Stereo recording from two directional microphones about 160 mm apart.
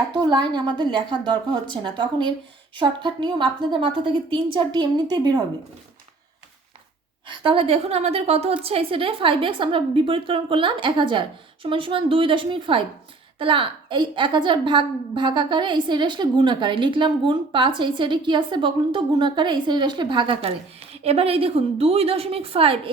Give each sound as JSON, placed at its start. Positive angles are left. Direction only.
{"t": 0.1, "sound": "a woman's voice", "side_deg": -30}
{"t": 7.3, "sound": "a woman's voice", "side_deg": -35}